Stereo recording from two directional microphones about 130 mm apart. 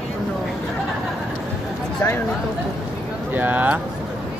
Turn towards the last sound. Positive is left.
turn(degrees=-15)  # may be behind; listen again after turning